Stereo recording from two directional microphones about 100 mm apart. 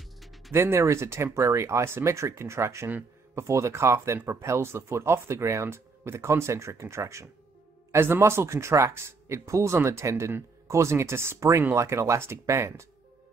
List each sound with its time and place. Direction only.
0.2 s music: centre (ahead or behind)
0.5 s speech: 25° right (ahead or behind)